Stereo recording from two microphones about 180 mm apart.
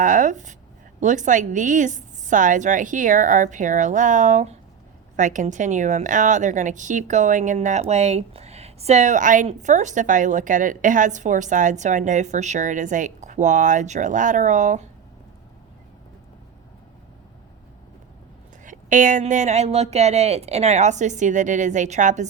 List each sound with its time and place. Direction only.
0.0 s a woman's voice: 45° right (ahead or behind)
18.6 s speech: 45° right (ahead or behind)